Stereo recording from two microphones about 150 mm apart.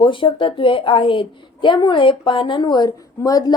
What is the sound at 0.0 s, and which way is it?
A woman's voice, 35° left (ahead or behind).